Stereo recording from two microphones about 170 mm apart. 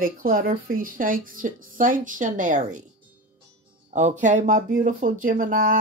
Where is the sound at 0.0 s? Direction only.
55° right (ahead or behind).